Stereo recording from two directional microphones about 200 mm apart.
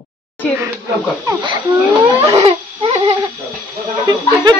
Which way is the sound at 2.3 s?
30° right (ahead or behind).